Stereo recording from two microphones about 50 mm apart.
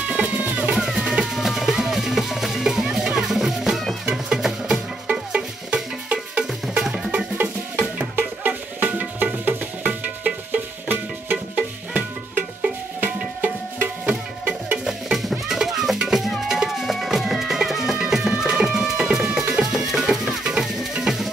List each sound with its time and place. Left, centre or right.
0.1 s music: right
0.7 s music: centre
5.0 s music: right
6.8 s music: centre
8.2 s music: right
14.9 s music: centre